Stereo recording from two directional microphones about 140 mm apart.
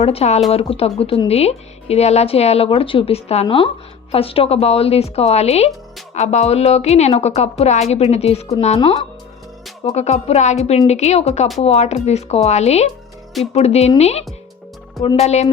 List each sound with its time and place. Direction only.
0.0 s speech: 45° left (ahead or behind)